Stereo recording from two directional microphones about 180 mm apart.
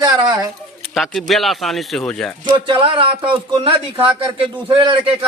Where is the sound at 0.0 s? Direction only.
20° right (ahead or behind).